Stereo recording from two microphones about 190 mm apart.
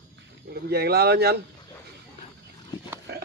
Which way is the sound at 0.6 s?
55° right (ahead or behind).